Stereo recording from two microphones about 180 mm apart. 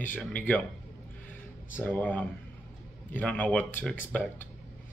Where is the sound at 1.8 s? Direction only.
10° left (ahead or behind).